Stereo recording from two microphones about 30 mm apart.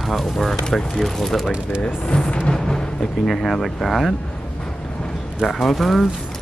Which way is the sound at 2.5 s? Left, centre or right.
Centre.